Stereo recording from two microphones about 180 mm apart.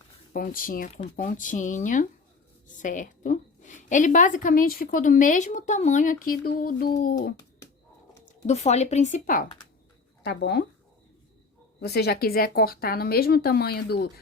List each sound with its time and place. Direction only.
0.3 s a woman's voice: 50° left (ahead or behind)
8.2 s speech: 40° left (ahead or behind)
10.2 s speech: 70° left (ahead or behind)
11.8 s speech: 65° left (ahead or behind)